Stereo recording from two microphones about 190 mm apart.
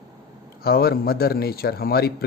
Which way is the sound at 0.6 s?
55° left (ahead or behind).